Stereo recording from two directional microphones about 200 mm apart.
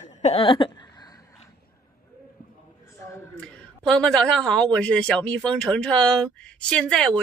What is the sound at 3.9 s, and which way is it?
Speech, 5° left (ahead or behind).